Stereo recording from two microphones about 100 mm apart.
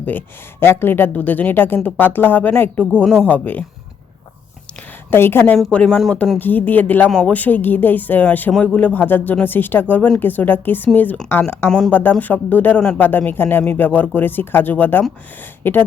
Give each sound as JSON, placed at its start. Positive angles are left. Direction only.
{"t": 0.0, "sound": "speech", "side_deg": 20}
{"t": 5.1, "sound": "speech", "side_deg": 25}
{"t": 5.5, "sound": "speech", "side_deg": 5}